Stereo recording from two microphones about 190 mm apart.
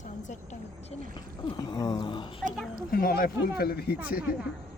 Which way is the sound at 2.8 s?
50° left (ahead or behind).